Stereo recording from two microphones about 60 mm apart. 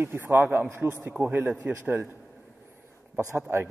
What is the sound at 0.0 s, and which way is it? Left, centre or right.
A man's voice, right.